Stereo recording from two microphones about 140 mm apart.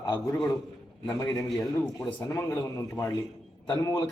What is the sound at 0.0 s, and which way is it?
A man's voice, 30° left (ahead or behind).